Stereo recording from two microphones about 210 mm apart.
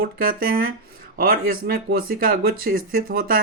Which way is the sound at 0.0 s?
45° right (ahead or behind).